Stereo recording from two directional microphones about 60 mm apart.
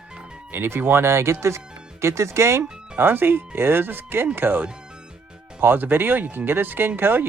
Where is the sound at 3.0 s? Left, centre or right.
Right.